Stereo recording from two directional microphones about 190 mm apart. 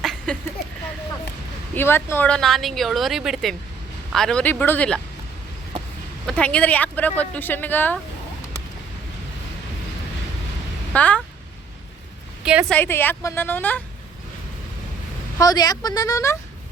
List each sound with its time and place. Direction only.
0.0 s a sound: centre (ahead or behind)
1.7 s a woman's voice: 10° left (ahead or behind)
6.2 s speech: 5° left (ahead or behind)
10.9 s speech: 5° left (ahead or behind)
12.5 s a woman's voice: 5° right (ahead or behind)
12.7 s speech: 10° left (ahead or behind)
15.4 s speech: 20° left (ahead or behind)